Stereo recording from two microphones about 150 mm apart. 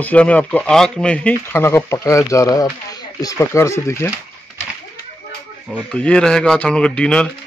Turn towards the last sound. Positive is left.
turn(degrees=5)  # may be behind; listen again after turning